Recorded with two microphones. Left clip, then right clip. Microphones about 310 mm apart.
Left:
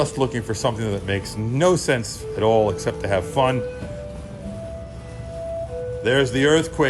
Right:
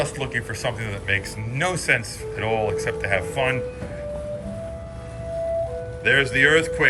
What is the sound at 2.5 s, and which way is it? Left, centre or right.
Speech, left.